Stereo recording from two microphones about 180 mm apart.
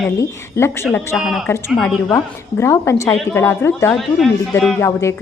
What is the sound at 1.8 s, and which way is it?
A woman's voice, 10° left (ahead or behind).